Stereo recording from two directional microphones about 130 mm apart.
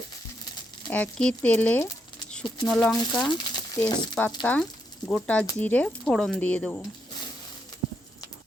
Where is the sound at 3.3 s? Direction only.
35° left (ahead or behind).